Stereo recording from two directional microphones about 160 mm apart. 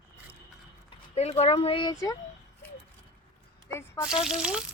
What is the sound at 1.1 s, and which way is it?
Speech, 40° left (ahead or behind).